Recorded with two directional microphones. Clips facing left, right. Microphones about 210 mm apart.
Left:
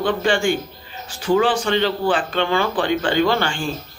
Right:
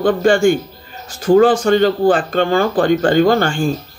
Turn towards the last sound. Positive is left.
turn(degrees=-45)  # may be behind; listen again after turning